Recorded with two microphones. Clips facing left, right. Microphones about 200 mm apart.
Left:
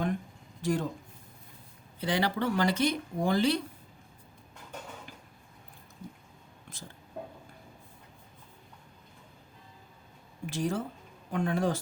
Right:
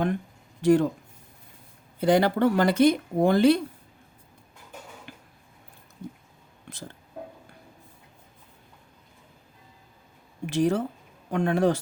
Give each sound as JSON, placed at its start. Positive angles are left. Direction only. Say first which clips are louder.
{"t": 0.6, "sound": "speech", "louder": "right 11 dB", "side_deg": -65}
{"t": 2.0, "sound": "speech", "louder": "right 9 dB", "side_deg": -50}
{"t": 10.4, "sound": "speech", "louder": "right 8 dB", "side_deg": -70}